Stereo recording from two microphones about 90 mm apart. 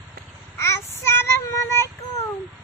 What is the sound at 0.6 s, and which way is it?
Child singing, 30° left (ahead or behind).